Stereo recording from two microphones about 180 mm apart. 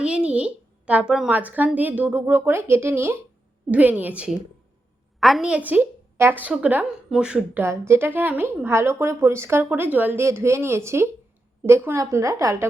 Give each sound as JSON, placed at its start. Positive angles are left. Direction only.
{"t": 0.0, "sound": "a woman's voice", "side_deg": -5}